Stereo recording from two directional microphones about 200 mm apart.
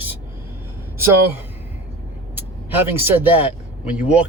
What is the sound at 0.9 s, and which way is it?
Speech, 15° right (ahead or behind).